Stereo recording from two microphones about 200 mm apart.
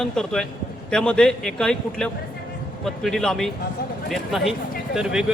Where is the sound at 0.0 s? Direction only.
Centre (ahead or behind).